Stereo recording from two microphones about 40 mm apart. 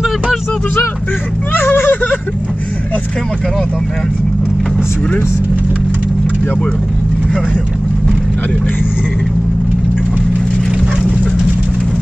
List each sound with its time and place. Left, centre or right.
1.5 s vehicle: left